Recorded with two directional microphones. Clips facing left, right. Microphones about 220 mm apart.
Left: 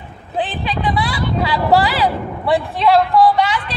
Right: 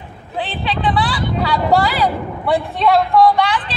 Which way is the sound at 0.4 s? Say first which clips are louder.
Left 1 dB; 15° left (ahead or behind).